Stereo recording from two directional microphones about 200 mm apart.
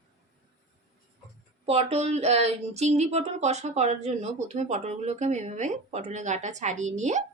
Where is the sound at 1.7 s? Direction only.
30° right (ahead or behind).